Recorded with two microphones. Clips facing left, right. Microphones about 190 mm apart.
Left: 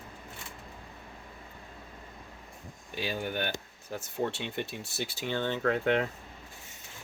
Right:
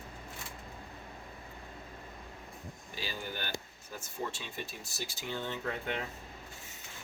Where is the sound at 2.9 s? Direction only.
60° left (ahead or behind).